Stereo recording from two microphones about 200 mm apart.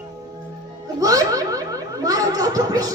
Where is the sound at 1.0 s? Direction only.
20° right (ahead or behind).